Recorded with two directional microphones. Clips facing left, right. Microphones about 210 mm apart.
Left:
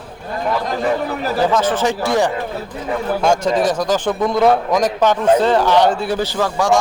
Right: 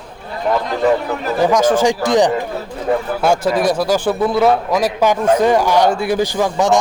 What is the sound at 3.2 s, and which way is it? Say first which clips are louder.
A man's voice: left 1 dB; 5° right (ahead or behind).